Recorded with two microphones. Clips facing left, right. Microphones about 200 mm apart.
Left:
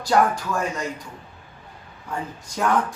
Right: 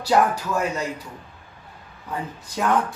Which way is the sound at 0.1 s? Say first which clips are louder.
Even; 5° right (ahead or behind).